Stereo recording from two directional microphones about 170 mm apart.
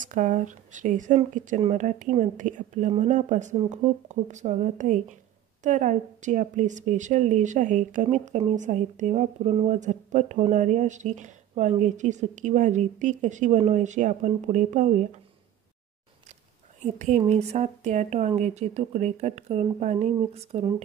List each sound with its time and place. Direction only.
0.0 s a woman's voice: 50° right (ahead or behind)
16.8 s a woman's voice: 40° right (ahead or behind)